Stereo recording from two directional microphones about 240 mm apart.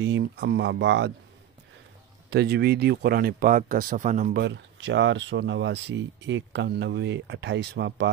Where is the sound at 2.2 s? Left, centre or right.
Right.